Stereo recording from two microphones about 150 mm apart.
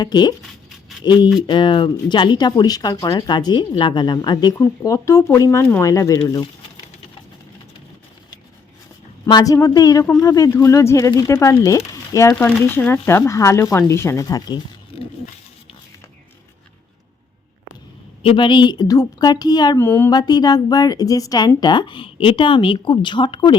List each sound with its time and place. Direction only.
0.0 s speech: 30° left (ahead or behind)
9.2 s speech: 25° left (ahead or behind)
12.3 s speech: 10° left (ahead or behind); by 14.6 s 25° left (ahead or behind)
18.2 s speech: 35° left (ahead or behind)
19.8 s speech: 15° left (ahead or behind)
20.1 s speech: 25° left (ahead or behind)